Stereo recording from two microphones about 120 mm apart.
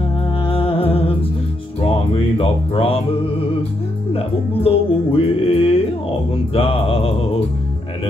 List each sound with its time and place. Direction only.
0.5 s music: 50° left (ahead or behind)
2.3 s music: 55° left (ahead or behind)